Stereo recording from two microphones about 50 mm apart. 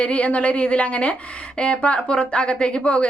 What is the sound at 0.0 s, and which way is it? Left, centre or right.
A woman's voice, left.